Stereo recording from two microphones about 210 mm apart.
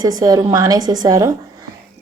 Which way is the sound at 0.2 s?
15° right (ahead or behind).